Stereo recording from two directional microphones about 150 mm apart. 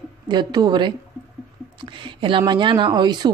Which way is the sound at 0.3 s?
30° right (ahead or behind).